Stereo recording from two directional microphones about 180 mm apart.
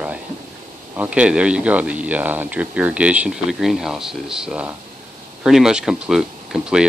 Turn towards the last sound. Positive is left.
turn(degrees=-5)  # may be behind; listen again after turning